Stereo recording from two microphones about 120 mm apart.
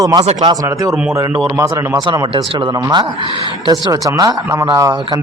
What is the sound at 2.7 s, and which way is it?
Speech, 35° right (ahead or behind).